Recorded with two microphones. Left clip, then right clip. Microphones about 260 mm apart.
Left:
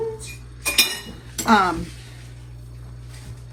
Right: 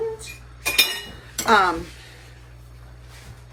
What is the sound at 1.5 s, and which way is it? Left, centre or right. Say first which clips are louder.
Speech: even; left.